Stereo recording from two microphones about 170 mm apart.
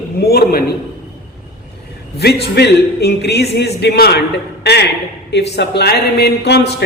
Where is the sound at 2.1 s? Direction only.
70° left (ahead or behind).